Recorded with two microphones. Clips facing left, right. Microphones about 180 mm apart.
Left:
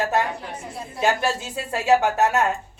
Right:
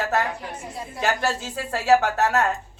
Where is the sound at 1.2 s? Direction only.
15° left (ahead or behind).